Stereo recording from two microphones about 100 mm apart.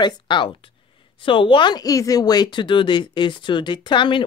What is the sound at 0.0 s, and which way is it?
Speech, 50° left (ahead or behind).